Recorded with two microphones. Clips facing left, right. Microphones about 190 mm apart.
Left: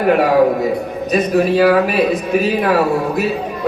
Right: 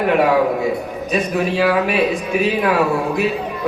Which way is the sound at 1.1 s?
40° left (ahead or behind).